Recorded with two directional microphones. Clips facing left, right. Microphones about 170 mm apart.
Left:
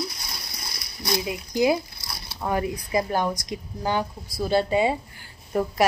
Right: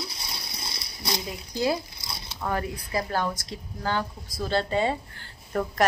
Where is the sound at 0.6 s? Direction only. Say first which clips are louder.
Even; 25° right (ahead or behind).